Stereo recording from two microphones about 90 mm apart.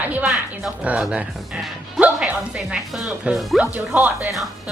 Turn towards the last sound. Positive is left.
turn(degrees=-20)  # may be behind; listen again after turning